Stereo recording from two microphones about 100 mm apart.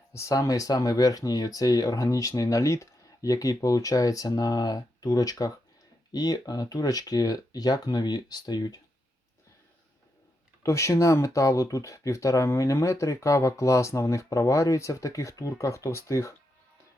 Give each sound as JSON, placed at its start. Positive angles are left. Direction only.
{"t": 0.1, "sound": "speech", "side_deg": 30}
{"t": 10.6, "sound": "speech", "side_deg": 30}